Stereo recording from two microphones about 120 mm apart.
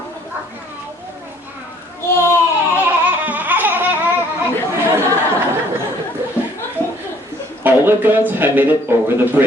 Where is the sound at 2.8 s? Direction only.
15° right (ahead or behind).